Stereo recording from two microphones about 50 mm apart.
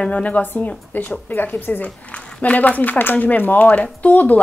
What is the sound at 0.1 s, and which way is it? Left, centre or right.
Speech, left.